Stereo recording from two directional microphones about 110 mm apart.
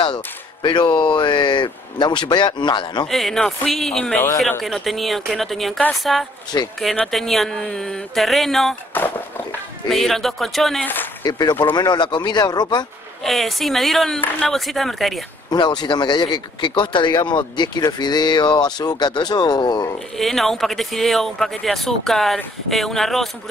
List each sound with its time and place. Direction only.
0.0 s speech: 45° left (ahead or behind)
3.1 s speech: centre (ahead or behind)
6.5 s speech: 30° left (ahead or behind)
7.1 s speech: centre (ahead or behind)
8.9 s speech: 20° left (ahead or behind)
9.8 s speech: centre (ahead or behind)
11.2 s speech: 40° left (ahead or behind)
13.2 s speech: centre (ahead or behind)
15.5 s speech: 40° left (ahead or behind)
20.2 s speech: centre (ahead or behind)